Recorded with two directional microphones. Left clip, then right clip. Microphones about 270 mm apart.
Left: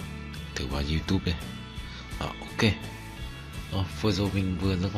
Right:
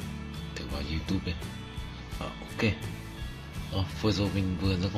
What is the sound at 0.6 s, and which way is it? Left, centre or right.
Speech, left.